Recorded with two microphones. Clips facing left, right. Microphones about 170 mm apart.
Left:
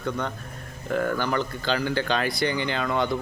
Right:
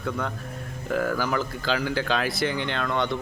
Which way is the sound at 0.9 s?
5° right (ahead or behind).